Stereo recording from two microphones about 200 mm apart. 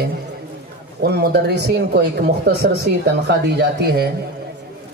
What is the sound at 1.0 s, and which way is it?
Speech, 55° right (ahead or behind).